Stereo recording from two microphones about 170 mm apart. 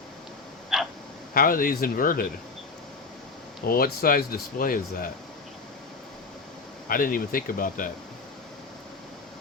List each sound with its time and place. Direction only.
0.7 s a sound: centre (ahead or behind)
1.3 s speech: 55° left (ahead or behind)
3.7 s speech: 60° left (ahead or behind)
6.8 s speech: 55° left (ahead or behind)